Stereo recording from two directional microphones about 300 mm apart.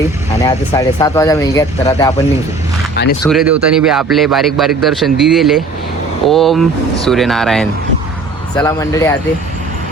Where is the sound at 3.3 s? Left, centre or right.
Centre.